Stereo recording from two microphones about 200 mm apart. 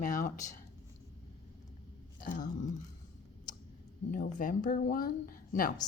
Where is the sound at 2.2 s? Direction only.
40° left (ahead or behind).